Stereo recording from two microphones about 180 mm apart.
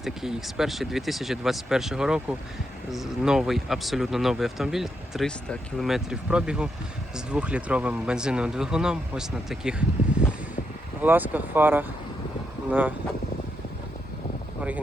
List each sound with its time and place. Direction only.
0.0 s speech: centre (ahead or behind)